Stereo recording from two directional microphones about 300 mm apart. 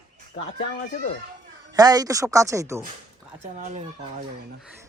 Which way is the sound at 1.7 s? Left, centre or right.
Centre.